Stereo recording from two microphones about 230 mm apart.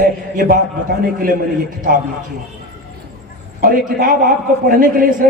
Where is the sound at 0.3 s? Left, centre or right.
Right.